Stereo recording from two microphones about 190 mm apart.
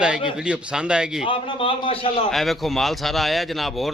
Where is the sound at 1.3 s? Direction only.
30° left (ahead or behind).